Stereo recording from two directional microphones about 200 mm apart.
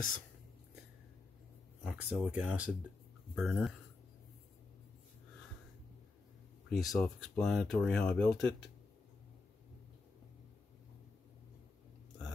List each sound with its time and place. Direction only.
1.9 s speech: 5° right (ahead or behind)
6.7 s speech: centre (ahead or behind)